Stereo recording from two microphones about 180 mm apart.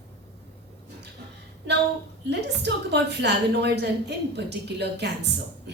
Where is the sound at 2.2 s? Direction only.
70° right (ahead or behind).